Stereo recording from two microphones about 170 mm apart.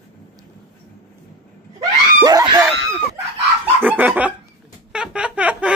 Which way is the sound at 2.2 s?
20° right (ahead or behind).